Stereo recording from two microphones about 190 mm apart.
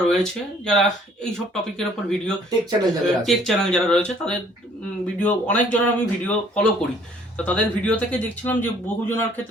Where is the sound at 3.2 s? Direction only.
Centre (ahead or behind).